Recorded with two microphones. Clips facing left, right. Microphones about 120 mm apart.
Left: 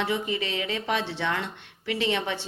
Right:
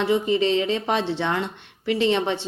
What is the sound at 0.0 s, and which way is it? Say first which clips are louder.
A woman's voice: right 8 dB; 30° right (ahead or behind).